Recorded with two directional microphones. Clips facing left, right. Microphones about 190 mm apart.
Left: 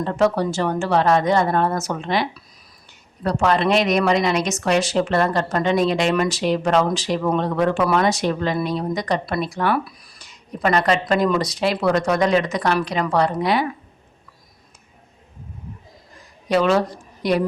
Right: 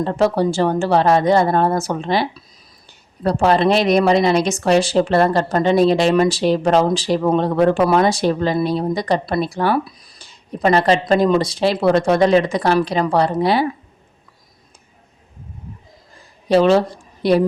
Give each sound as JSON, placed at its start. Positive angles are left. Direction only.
{"t": 0.0, "sound": "speech", "side_deg": -30}
{"t": 16.5, "sound": "speech", "side_deg": -30}